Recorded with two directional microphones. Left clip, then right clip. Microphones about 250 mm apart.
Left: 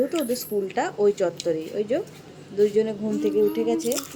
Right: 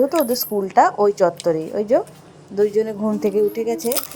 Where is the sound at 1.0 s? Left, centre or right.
Centre.